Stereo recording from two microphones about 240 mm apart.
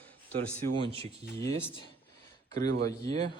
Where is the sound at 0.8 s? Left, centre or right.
Right.